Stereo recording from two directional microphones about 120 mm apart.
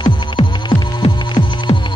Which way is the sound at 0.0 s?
40° left (ahead or behind).